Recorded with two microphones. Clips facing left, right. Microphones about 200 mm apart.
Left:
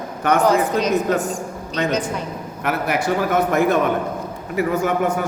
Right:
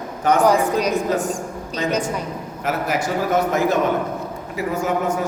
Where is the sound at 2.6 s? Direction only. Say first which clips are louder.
Left 1 dB; 60° left (ahead or behind).